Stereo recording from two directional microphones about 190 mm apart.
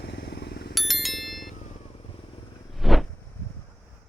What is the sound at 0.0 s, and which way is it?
Vehicle, 65° left (ahead or behind).